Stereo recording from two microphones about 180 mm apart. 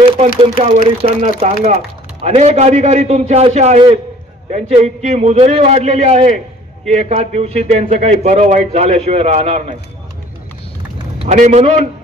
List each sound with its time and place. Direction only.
0.4 s a man's voice: 30° right (ahead or behind)
11.1 s a man's voice: 40° right (ahead or behind)